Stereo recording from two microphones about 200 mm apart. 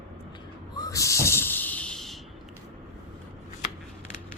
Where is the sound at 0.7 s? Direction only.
15° left (ahead or behind); by 2.2 s centre (ahead or behind).